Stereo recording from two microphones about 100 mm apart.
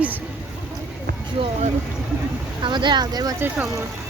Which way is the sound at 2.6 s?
50° right (ahead or behind).